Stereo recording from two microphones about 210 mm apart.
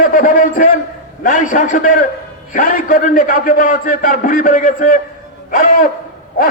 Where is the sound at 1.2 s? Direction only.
40° left (ahead or behind).